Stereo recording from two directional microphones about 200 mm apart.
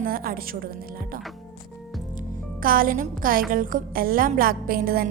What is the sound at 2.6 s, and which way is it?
A woman's voice, 45° right (ahead or behind).